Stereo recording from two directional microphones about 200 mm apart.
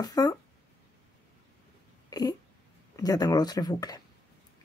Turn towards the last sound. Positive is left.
turn(degrees=20)  # may be behind; listen again after turning